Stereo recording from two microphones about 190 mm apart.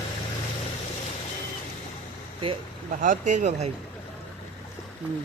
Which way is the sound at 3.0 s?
40° right (ahead or behind).